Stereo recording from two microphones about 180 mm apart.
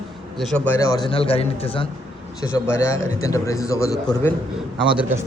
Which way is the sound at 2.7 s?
15° left (ahead or behind).